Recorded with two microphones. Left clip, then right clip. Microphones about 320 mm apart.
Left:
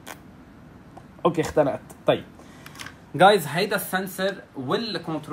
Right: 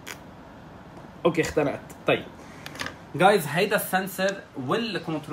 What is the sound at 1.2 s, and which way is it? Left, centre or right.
Speech, centre.